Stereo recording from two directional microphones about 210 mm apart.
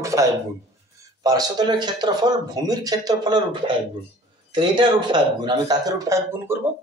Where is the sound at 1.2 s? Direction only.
20° right (ahead or behind).